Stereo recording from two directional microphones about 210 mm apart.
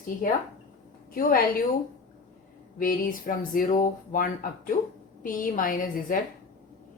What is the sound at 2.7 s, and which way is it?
Speech, 40° left (ahead or behind).